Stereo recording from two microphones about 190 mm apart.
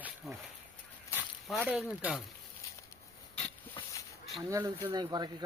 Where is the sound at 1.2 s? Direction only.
5° right (ahead or behind).